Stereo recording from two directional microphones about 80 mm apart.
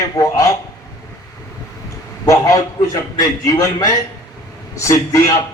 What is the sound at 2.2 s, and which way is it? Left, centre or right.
A man's voice, left.